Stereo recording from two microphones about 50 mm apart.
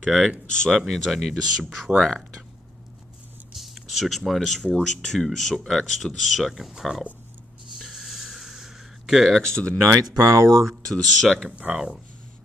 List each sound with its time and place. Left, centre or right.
0.0 s speech: centre
3.5 s speech: centre
7.7 s a sound: centre
9.4 s speech: centre
9.8 s speech: right
10.9 s speech: centre
11.7 s speech: centre